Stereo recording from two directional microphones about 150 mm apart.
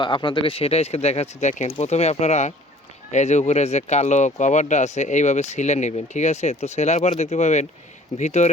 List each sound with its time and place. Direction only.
0.0 s speech: 30° left (ahead or behind); by 8.4 s 50° left (ahead or behind)